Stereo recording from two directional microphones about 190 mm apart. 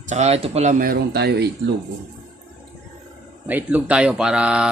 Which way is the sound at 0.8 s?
55° right (ahead or behind).